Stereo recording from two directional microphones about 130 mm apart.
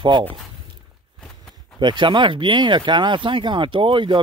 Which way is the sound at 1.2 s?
5° left (ahead or behind).